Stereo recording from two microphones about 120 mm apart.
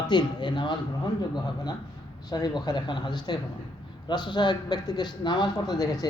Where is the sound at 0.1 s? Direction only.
40° left (ahead or behind).